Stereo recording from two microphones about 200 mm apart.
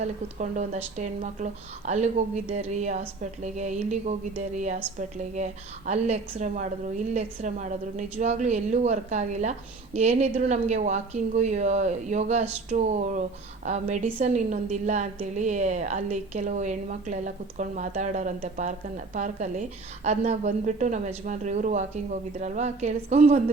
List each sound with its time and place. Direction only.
0.0 s a woman's voice: 35° right (ahead or behind)